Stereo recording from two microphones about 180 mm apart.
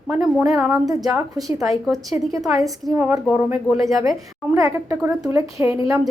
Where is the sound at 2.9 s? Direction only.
10° right (ahead or behind).